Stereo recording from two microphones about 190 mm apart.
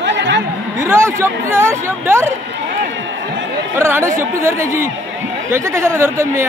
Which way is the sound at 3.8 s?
15° right (ahead or behind).